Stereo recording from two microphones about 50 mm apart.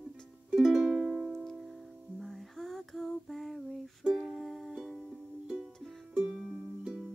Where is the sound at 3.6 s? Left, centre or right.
Centre.